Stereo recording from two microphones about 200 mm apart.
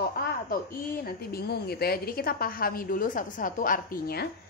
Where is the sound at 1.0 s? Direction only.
50° left (ahead or behind).